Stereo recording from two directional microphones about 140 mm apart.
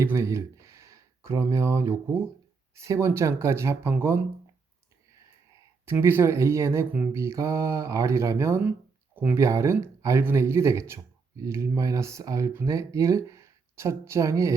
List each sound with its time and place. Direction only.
0.0 s speech: 20° right (ahead or behind)
5.8 s speech: 15° right (ahead or behind)